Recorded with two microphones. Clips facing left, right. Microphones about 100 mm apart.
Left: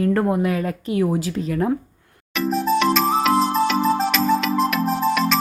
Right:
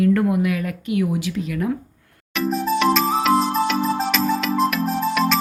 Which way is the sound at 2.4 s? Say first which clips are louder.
Left 1 dB; centre (ahead or behind).